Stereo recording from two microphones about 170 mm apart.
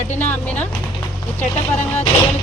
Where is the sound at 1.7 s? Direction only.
40° left (ahead or behind).